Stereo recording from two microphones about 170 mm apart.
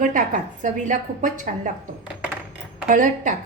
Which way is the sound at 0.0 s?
50° right (ahead or behind).